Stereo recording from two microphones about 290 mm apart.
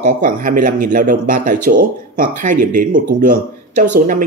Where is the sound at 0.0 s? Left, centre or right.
Right.